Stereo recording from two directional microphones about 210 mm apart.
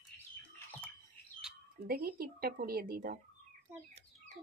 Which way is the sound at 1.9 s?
45° right (ahead or behind).